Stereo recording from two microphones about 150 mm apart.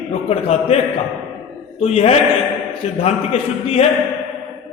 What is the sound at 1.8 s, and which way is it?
A man's voice, 45° left (ahead or behind).